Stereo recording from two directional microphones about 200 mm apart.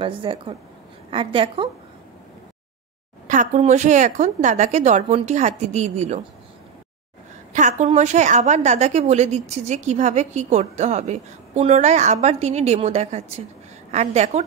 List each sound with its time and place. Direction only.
0.0 s a woman's voice: 25° right (ahead or behind)
3.3 s a woman's voice: 35° right (ahead or behind)
7.5 s a woman's voice: 35° right (ahead or behind)